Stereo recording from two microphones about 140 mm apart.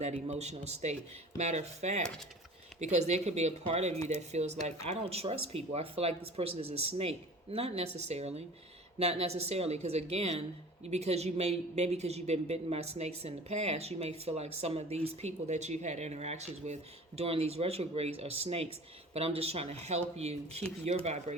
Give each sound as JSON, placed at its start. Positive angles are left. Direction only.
{"t": 0.0, "sound": "speech", "side_deg": -50}